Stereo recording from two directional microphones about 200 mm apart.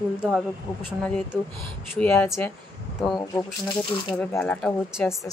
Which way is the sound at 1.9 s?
10° left (ahead or behind).